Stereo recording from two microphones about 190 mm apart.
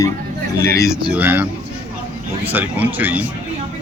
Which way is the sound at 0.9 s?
5° right (ahead or behind).